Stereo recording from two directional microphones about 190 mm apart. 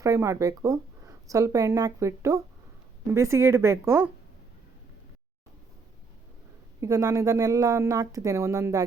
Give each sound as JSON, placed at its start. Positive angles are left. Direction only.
{"t": 0.0, "sound": "speech", "side_deg": -15}
{"t": 6.7, "sound": "speech", "side_deg": -15}